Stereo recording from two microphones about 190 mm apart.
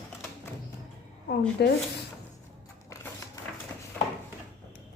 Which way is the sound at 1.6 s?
60° left (ahead or behind).